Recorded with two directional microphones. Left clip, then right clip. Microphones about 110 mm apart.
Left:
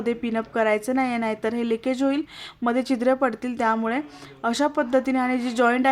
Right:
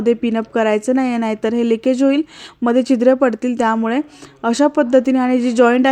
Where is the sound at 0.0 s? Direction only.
35° right (ahead or behind).